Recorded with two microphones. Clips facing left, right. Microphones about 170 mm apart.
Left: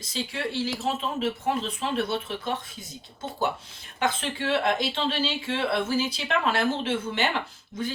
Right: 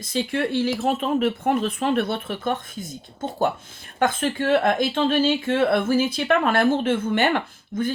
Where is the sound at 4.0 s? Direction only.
50° right (ahead or behind).